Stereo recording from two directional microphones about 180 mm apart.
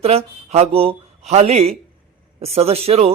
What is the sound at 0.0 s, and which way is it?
Speech, 35° right (ahead or behind).